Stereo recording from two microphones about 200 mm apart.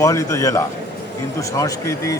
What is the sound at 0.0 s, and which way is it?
A man's voice, 15° left (ahead or behind).